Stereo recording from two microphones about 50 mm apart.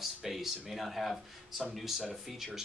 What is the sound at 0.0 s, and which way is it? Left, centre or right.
Speech, centre.